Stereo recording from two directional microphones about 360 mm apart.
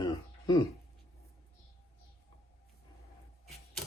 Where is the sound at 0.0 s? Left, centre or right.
Centre.